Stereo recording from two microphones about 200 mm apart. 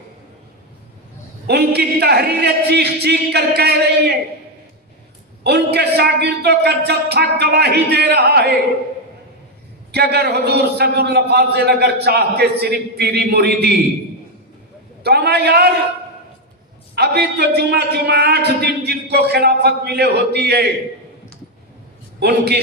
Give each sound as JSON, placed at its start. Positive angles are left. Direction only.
{"t": 1.5, "sound": "a man's voice", "side_deg": -55}
{"t": 5.4, "sound": "a man's voice", "side_deg": -55}
{"t": 9.9, "sound": "a man's voice", "side_deg": -55}
{"t": 15.0, "sound": "a man's voice", "side_deg": -55}
{"t": 16.9, "sound": "a man's voice", "side_deg": -55}
{"t": 22.2, "sound": "a man's voice", "side_deg": -55}